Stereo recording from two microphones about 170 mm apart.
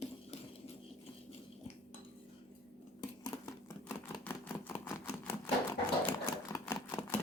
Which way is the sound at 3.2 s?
20° left (ahead or behind).